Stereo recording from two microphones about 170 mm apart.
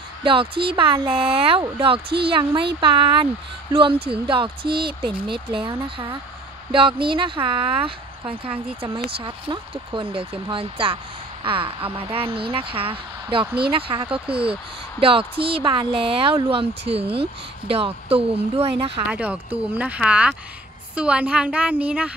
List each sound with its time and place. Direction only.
0.2 s speech: 30° right (ahead or behind)
19.0 s speech: 10° right (ahead or behind)